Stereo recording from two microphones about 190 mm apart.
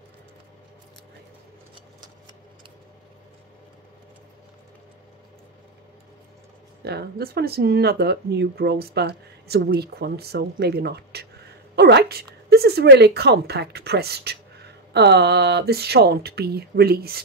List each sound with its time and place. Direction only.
6.8 s a woman's voice: 60° right (ahead or behind)